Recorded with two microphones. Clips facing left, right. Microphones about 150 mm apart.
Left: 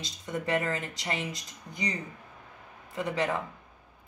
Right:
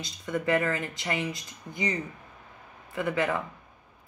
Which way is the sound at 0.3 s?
20° left (ahead or behind).